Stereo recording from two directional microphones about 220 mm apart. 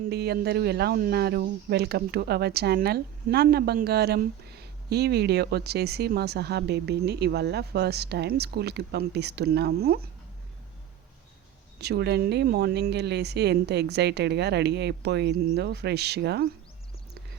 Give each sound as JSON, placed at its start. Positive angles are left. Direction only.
{"t": 0.1, "sound": "speech", "side_deg": -45}
{"t": 11.8, "sound": "speech", "side_deg": -50}